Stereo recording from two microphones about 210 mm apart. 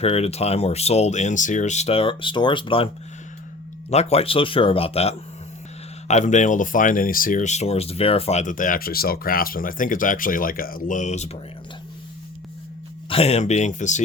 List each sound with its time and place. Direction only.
0.0 s speech: 30° left (ahead or behind)
13.1 s speech: 30° left (ahead or behind)